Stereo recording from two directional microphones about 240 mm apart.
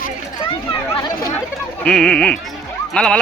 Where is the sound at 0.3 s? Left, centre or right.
Centre.